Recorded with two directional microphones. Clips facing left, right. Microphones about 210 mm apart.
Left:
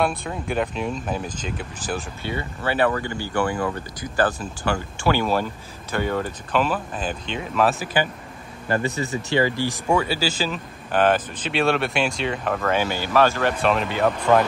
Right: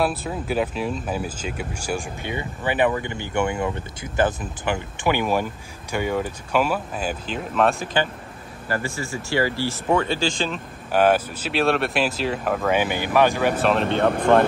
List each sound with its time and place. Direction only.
0.0 s speech: 5° right (ahead or behind)
8.6 s speech: 20° left (ahead or behind)
10.9 s speech: 10° right (ahead or behind)